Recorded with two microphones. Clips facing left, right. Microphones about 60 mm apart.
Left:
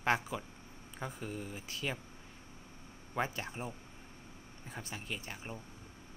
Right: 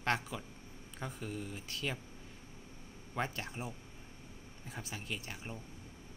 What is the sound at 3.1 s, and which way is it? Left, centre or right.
Speech, centre.